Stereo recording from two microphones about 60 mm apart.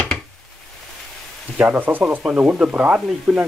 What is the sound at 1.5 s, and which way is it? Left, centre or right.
Speech, right.